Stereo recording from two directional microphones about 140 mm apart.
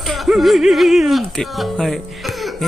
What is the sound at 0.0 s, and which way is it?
Speech, centre (ahead or behind).